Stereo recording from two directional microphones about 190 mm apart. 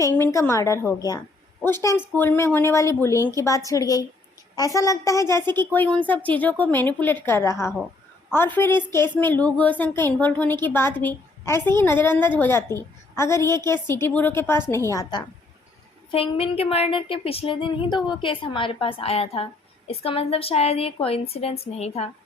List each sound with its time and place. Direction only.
0.0 s a woman's voice: 15° left (ahead or behind)
16.1 s a woman's voice: 30° left (ahead or behind)